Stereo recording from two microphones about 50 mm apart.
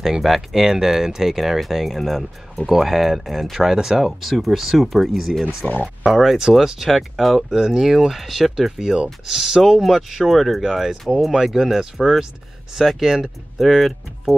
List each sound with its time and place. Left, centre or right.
0.0 s speech: centre
5.6 s speech: left
6.0 s speech: centre